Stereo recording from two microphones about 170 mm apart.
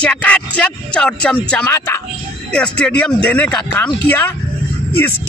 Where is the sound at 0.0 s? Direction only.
10° left (ahead or behind).